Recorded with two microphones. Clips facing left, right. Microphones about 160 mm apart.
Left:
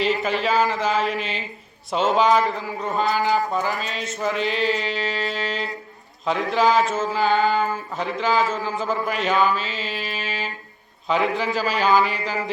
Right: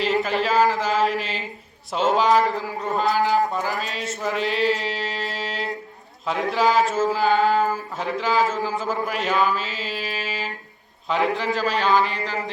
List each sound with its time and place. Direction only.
0.0 s mantra: centre (ahead or behind)